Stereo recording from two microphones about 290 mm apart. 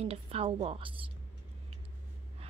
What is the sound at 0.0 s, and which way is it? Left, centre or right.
A woman's voice, right.